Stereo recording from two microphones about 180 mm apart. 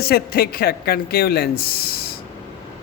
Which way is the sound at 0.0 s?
60° left (ahead or behind).